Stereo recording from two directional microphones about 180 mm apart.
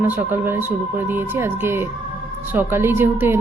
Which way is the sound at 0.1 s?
10° right (ahead or behind).